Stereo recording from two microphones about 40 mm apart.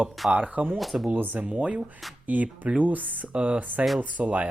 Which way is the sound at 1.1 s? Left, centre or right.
Right.